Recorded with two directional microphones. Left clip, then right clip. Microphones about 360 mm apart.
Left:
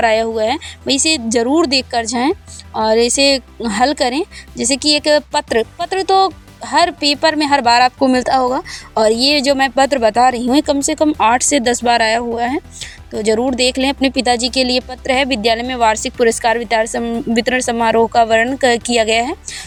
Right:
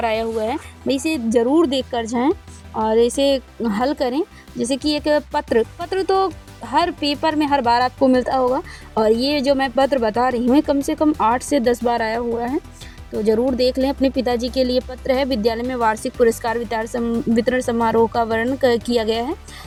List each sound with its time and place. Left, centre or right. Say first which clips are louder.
0.0 s speech: left 7 dB; left